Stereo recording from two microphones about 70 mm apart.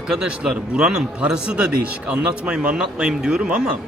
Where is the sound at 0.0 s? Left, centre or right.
Centre.